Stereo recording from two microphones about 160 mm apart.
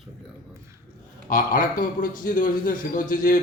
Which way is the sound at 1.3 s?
55° left (ahead or behind).